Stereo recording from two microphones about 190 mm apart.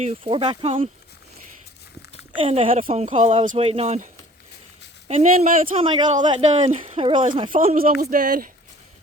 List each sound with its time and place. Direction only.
0.0 s speech: 30° right (ahead or behind)
2.3 s speech: 30° right (ahead or behind)
5.7 s speech: 25° right (ahead or behind)
8.1 s speech: 45° right (ahead or behind)